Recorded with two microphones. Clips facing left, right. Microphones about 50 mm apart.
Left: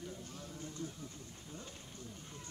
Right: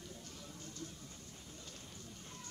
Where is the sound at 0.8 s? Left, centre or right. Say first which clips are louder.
Left 5 dB; centre.